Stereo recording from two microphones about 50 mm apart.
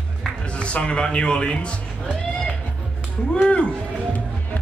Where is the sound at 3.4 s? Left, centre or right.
Left.